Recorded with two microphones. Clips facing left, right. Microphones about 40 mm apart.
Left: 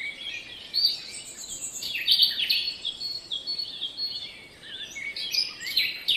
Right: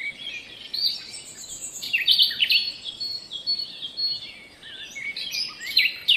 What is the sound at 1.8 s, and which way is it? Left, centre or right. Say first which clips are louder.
Bird: right 4 dB; right.